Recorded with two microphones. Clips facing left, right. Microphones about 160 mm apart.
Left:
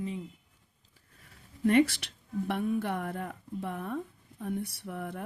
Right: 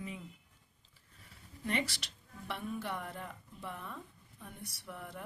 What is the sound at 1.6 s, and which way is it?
Speech, 55° left (ahead or behind).